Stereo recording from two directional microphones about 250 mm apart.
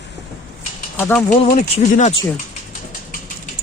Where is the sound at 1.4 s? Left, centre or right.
Left.